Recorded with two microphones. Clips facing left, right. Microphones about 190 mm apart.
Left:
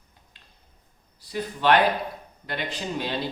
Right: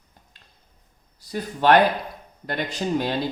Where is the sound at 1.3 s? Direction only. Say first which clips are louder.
Right 3 dB; 45° right (ahead or behind).